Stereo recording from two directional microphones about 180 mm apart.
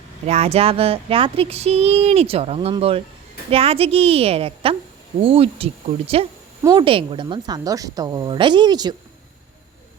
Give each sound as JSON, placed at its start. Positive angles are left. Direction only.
{"t": 0.3, "sound": "speech", "side_deg": -35}
{"t": 6.6, "sound": "a woman's voice", "side_deg": -25}